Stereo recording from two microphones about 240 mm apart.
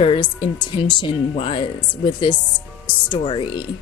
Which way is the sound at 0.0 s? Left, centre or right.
Left.